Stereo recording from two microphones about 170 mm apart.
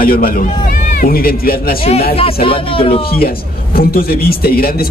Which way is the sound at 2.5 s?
30° left (ahead or behind).